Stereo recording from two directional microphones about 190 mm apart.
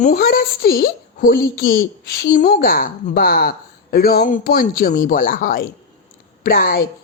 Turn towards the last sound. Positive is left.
turn(degrees=50)  # may be behind; listen again after turning